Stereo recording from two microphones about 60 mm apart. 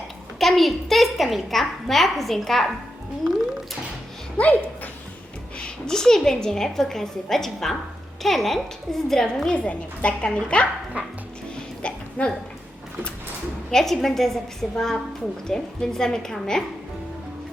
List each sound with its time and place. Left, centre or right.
0.3 s a woman's voice: centre
4.4 s speech: left
5.5 s a woman's voice: centre
11.0 s speech: right
11.8 s hiccup: centre
13.7 s a woman's voice: centre